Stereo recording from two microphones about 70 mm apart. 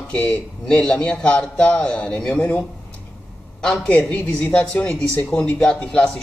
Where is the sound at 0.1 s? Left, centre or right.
Centre.